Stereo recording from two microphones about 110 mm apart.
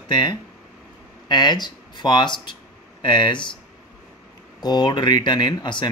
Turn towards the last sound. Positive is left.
turn(degrees=45)  # may be behind; listen again after turning